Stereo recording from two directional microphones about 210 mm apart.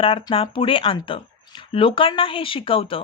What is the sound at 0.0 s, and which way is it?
Speech, 25° left (ahead or behind).